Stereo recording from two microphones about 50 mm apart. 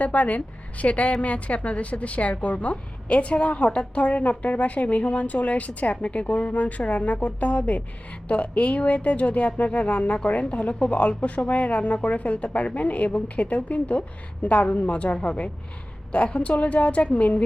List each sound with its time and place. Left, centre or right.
0.0 s a woman's voice: left